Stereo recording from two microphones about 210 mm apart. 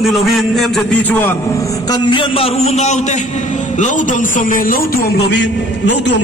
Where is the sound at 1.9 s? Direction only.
20° left (ahead or behind).